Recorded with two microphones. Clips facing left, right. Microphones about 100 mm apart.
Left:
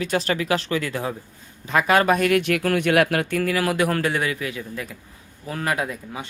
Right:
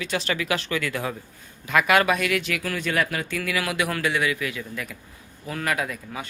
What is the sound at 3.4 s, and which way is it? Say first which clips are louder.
A man's voice: left 4 dB; 40° left (ahead or behind).